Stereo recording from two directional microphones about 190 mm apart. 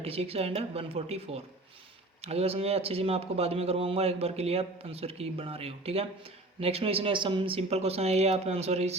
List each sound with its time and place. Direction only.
0.0 s a man's voice: 30° right (ahead or behind)